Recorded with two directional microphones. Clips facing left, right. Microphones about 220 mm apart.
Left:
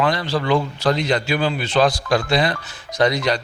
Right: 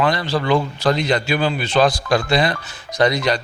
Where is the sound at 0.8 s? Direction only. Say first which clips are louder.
Right 1 dB; 15° right (ahead or behind).